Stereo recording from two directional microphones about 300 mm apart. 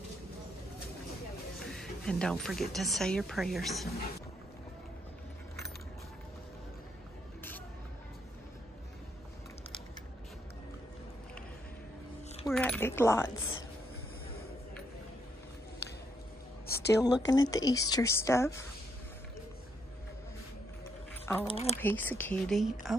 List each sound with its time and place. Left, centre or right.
1.7 s speech: centre
12.4 s speech: centre
16.6 s a sound: left
17.3 s a woman's voice: centre
21.1 s a sound: centre
21.5 s speech: centre
21.7 s a woman's voice: centre